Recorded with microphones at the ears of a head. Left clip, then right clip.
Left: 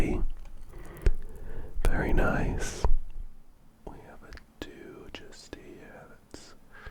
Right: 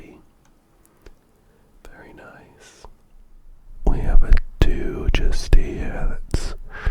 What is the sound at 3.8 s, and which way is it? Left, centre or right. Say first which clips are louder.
Whispering: right 17 dB; right.